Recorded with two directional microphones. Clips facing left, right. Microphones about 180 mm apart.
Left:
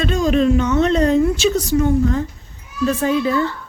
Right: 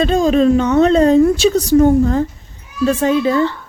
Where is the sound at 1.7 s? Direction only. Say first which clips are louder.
Right 8 dB; 40° right (ahead or behind).